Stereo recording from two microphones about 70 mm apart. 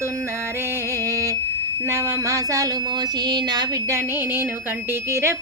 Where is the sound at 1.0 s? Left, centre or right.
Right.